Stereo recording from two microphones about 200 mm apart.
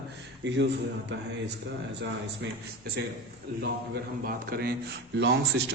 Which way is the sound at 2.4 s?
65° right (ahead or behind).